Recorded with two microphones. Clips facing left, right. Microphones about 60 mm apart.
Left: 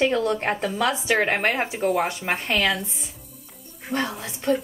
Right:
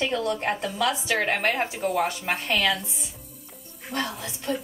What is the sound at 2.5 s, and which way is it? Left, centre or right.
Speech, centre.